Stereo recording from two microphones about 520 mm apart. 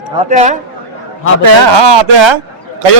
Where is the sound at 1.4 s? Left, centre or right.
Right.